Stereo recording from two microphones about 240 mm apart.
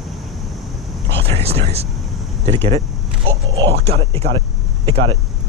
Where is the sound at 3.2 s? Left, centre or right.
Right.